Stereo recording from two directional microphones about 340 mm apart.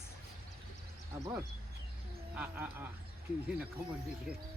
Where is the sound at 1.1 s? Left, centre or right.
Centre.